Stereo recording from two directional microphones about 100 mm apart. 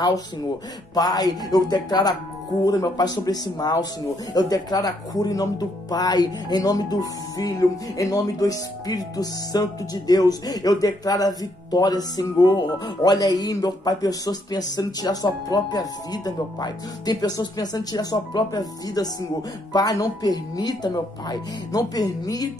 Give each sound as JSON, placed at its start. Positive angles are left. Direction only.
{"t": 0.9, "sound": "speech", "side_deg": 40}